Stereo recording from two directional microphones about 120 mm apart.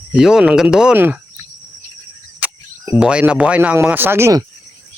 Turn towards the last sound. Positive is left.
turn(degrees=-20)  # may be behind; listen again after turning